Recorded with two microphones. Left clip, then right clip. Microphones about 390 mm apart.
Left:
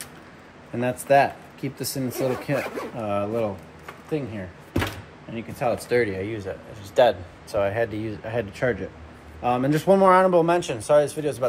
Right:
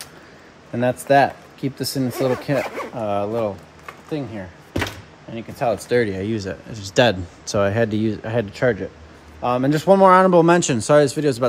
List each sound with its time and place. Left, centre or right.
0.7 s speech: right
5.3 s speech: right